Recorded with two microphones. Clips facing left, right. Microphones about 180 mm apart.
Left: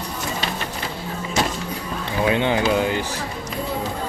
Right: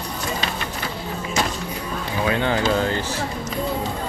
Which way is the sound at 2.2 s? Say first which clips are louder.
Left 2 dB; 20° left (ahead or behind).